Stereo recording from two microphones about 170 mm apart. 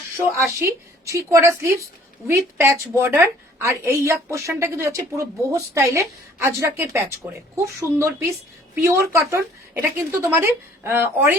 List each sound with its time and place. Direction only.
0.2 s a woman's voice: 15° right (ahead or behind)